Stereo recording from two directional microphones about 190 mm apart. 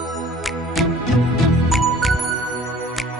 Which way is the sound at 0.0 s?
Centre (ahead or behind).